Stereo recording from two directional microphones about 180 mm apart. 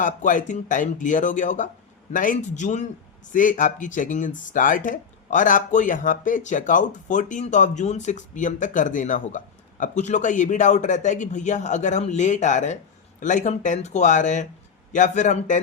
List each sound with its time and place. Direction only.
0.0 s speech: 45° left (ahead or behind)